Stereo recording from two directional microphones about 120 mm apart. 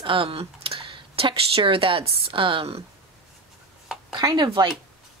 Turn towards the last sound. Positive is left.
turn(degrees=-40)  # may be behind; listen again after turning